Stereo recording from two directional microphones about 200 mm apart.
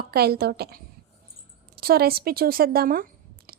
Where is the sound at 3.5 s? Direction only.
45° right (ahead or behind).